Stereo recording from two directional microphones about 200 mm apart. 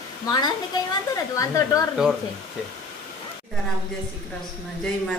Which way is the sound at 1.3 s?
15° left (ahead or behind).